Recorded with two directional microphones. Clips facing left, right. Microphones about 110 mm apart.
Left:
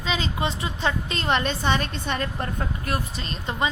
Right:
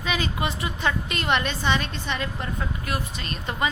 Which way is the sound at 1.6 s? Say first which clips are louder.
Left 1 dB; 45° left (ahead or behind).